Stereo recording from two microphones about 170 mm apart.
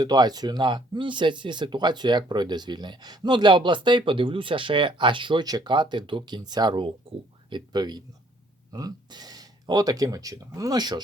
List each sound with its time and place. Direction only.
0.0 s speech: 25° right (ahead or behind)